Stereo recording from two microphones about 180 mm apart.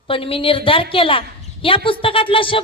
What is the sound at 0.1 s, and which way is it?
A woman's voice, 30° left (ahead or behind).